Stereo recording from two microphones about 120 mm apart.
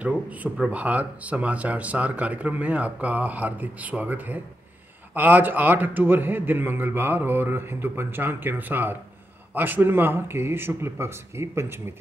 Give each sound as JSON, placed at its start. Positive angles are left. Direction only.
{"t": 0.0, "sound": "speech", "side_deg": -10}